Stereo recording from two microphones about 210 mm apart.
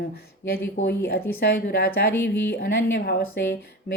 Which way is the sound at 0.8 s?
35° left (ahead or behind).